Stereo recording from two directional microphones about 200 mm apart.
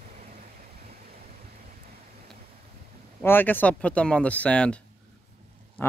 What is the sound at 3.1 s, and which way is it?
Speech, 10° left (ahead or behind).